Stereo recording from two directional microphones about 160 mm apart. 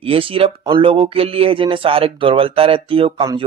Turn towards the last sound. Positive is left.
turn(degrees=-35)  # may be behind; listen again after turning